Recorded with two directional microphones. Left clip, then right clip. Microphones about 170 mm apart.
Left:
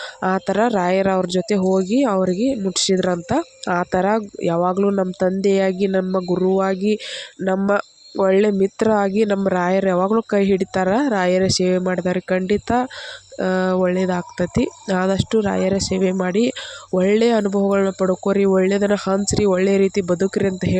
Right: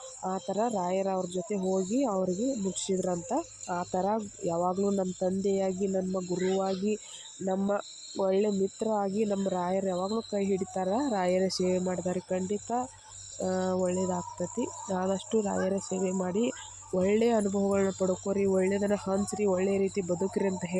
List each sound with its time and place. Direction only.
0.2 s speech: 50° left (ahead or behind)
10.0 s speech: 65° left (ahead or behind)
10.3 s speech: 50° left (ahead or behind)